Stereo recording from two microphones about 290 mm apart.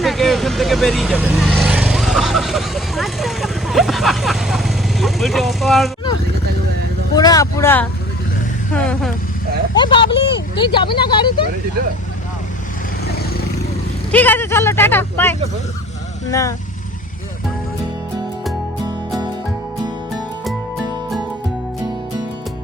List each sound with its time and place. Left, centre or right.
0.0 s vehicle: centre
7.2 s speech: centre
9.7 s speech: centre
14.1 s speech: centre